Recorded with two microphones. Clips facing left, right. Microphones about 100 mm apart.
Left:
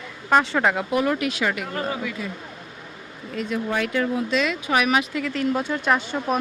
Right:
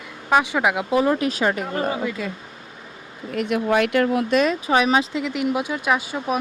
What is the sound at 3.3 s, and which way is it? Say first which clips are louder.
Speech: right 5 dB; 65° right (ahead or behind).